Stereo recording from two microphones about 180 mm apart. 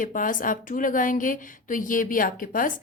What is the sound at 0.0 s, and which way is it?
Speech, 50° left (ahead or behind).